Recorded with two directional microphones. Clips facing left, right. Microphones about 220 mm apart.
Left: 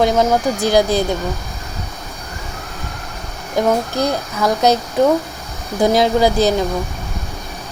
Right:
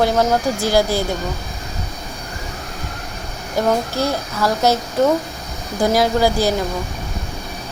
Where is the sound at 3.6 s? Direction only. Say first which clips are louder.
Left 2 dB; 15° left (ahead or behind).